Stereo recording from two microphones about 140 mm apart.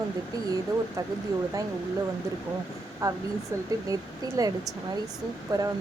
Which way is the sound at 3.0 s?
25° right (ahead or behind).